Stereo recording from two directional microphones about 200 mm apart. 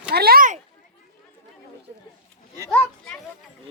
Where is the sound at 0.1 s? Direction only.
50° right (ahead or behind).